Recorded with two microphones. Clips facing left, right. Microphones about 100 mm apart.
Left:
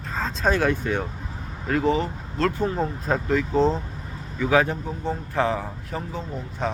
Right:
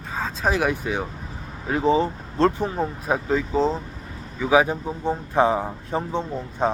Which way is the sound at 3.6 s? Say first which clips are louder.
Left 2 dB; centre (ahead or behind).